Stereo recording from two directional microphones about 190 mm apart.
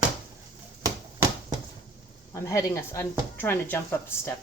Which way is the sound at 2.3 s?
15° left (ahead or behind).